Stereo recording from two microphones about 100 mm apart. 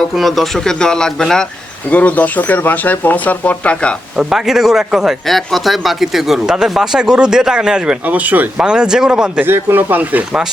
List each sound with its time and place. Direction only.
0.2 s speech: centre (ahead or behind)
4.2 s speech: 5° right (ahead or behind)
9.5 s speech: 20° right (ahead or behind)